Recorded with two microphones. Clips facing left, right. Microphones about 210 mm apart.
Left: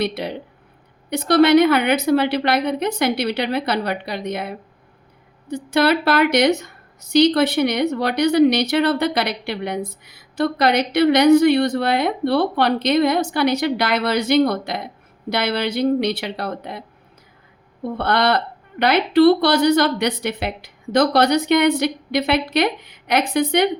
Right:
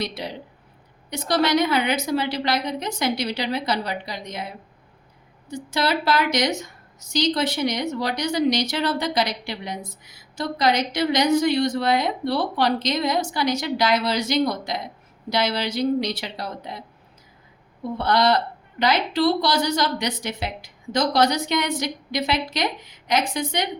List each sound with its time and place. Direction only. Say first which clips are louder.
0.0 s a woman's voice: left 6 dB; 60° left (ahead or behind)
17.9 s a woman's voice: left 1 dB; 60° left (ahead or behind)